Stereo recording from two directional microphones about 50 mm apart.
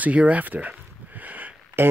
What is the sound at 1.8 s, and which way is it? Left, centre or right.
Speech, right.